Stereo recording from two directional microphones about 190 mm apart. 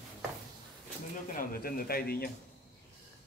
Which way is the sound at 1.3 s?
50° left (ahead or behind).